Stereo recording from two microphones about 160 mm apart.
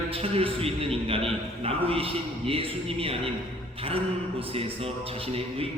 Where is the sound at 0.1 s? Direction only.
35° right (ahead or behind).